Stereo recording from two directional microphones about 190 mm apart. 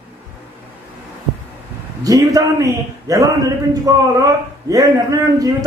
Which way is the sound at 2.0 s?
20° right (ahead or behind).